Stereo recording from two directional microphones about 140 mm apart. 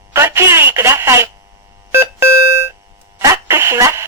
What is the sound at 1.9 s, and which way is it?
Beep, 15° right (ahead or behind).